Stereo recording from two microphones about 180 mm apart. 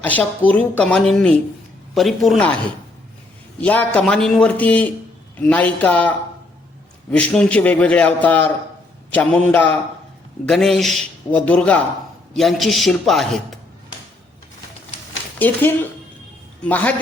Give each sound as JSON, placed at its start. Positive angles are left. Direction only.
{"t": 0.0, "sound": "a man's voice", "side_deg": 10}
{"t": 3.6, "sound": "a man's voice", "side_deg": 5}
{"t": 15.4, "sound": "a man's voice", "side_deg": 10}